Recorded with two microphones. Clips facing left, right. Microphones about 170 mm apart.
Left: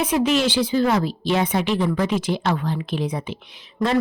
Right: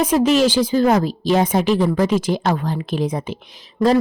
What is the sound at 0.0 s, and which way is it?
Speech, 45° right (ahead or behind).